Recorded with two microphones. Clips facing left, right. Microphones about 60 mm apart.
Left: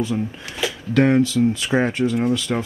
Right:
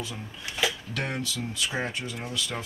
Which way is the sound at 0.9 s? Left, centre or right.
Left.